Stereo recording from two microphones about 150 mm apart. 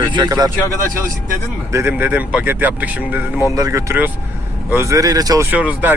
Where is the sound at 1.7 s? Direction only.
15° right (ahead or behind).